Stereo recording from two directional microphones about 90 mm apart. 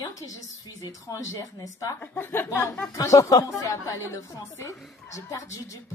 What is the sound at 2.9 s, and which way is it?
A woman's voice, 35° left (ahead or behind).